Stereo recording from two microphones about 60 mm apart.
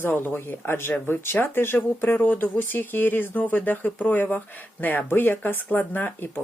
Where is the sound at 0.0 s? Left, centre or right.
Left.